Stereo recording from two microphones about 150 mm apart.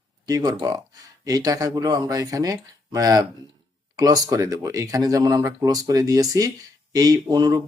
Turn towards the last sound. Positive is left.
turn(degrees=-25)  # may be behind; listen again after turning